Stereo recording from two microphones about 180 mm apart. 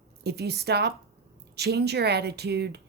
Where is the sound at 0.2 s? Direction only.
65° right (ahead or behind).